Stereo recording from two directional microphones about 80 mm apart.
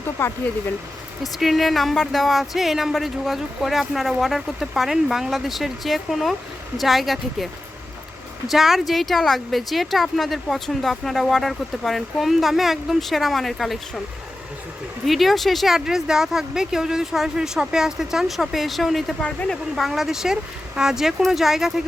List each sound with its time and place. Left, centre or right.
0.2 s speech: left
1.2 s speech: centre
8.4 s speech: centre
15.0 s speech: centre
19.2 s speech: centre
19.7 s speech: centre